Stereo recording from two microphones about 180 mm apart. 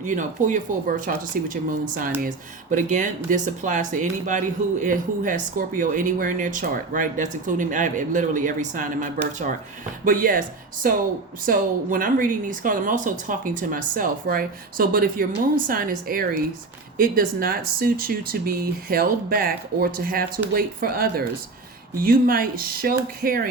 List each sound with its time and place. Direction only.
0.0 s speech: 45° right (ahead or behind)